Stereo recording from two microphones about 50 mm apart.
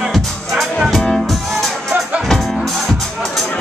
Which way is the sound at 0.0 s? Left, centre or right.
Centre.